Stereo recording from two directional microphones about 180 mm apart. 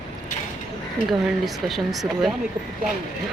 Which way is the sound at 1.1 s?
Centre (ahead or behind).